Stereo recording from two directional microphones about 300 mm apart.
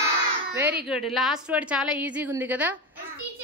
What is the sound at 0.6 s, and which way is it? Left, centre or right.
A woman's voice, centre.